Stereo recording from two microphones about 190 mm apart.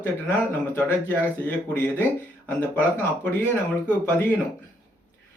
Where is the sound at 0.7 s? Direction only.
10° left (ahead or behind).